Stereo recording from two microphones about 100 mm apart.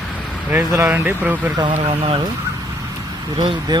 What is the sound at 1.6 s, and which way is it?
Speech, 60° right (ahead or behind).